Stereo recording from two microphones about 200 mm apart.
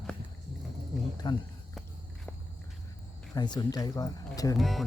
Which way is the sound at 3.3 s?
20° left (ahead or behind).